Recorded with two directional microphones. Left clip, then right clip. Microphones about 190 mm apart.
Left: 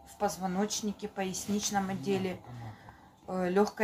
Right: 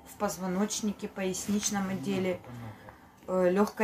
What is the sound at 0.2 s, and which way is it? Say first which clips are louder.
Speech: even; 15° left (ahead or behind).